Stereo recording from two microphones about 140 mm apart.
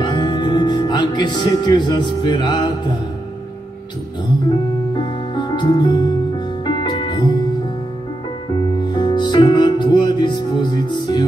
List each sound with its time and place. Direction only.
0.0 s speech: 35° left (ahead or behind)
4.5 s music: 35° left (ahead or behind)
8.5 s music: 30° left (ahead or behind)